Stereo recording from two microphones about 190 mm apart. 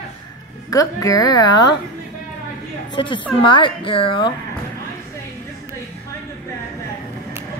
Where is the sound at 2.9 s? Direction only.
25° left (ahead or behind).